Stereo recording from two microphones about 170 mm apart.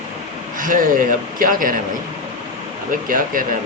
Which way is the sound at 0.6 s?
50° right (ahead or behind).